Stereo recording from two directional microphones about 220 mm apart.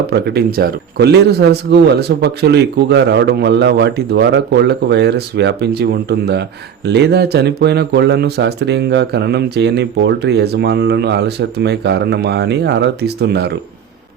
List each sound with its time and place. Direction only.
0.1 s speech: 45° right (ahead or behind)